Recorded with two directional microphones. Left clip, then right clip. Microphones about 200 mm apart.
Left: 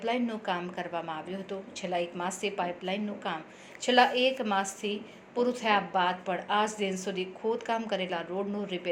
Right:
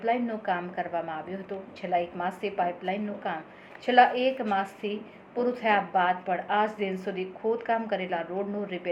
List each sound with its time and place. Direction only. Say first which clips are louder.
0.0 s a woman's voice: right 3 dB; 30° left (ahead or behind)